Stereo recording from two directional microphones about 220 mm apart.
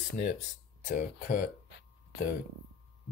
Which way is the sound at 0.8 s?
40° left (ahead or behind).